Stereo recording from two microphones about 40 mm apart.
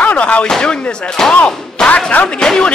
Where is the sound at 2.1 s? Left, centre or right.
Left.